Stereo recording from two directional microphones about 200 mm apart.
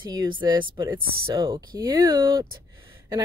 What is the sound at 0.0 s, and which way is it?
Speech, 20° right (ahead or behind).